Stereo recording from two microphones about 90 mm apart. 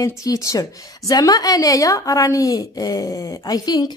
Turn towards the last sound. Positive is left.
turn(degrees=45)  # may be behind; listen again after turning